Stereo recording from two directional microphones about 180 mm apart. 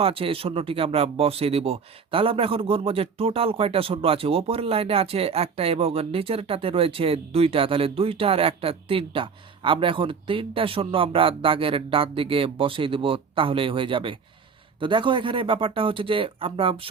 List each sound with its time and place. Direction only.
0.0 s speech: 30° right (ahead or behind)